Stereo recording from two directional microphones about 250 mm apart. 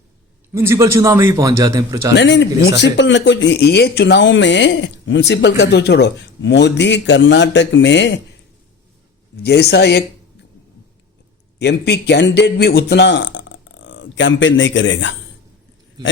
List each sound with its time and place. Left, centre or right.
0.5 s a man's voice: centre
2.1 s speech: left
9.4 s speech: left
11.6 s a man's voice: left
16.0 s speech: centre